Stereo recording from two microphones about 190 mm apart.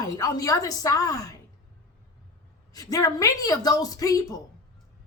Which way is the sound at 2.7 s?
20° left (ahead or behind).